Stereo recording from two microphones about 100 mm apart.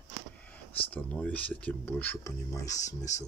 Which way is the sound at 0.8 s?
10° left (ahead or behind).